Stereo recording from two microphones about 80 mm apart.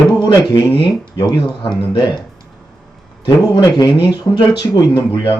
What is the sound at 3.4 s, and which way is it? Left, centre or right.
Speech, left.